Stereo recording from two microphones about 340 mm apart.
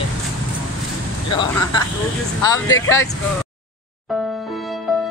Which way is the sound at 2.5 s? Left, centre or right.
Centre.